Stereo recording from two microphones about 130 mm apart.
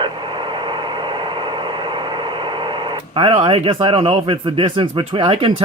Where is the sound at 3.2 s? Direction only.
45° right (ahead or behind).